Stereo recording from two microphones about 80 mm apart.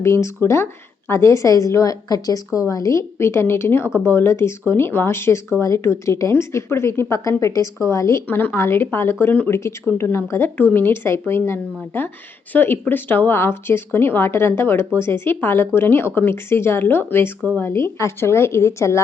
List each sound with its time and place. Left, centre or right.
0.0 s speech: left
8.3 s speech: left
9.2 s speech: centre
9.5 s speech: left